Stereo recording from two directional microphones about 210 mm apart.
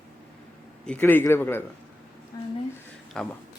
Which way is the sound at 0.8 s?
5° left (ahead or behind).